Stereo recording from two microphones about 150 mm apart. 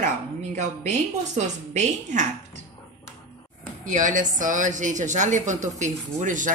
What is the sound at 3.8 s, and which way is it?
A woman's voice, 60° right (ahead or behind).